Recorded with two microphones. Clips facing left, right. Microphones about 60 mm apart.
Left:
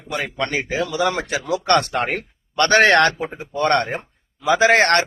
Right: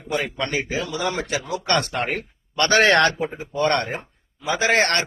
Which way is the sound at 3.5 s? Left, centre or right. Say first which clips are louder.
Left 3 dB; left.